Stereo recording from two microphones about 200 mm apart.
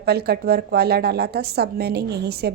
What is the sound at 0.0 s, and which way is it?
A woman's voice, 50° right (ahead or behind).